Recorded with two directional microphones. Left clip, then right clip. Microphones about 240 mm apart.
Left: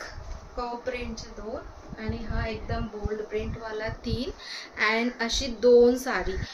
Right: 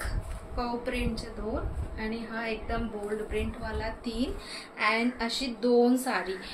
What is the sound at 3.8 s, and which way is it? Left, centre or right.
A woman's voice, left.